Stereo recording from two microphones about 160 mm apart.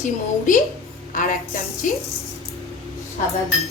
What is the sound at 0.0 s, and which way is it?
A woman's voice, 55° left (ahead or behind).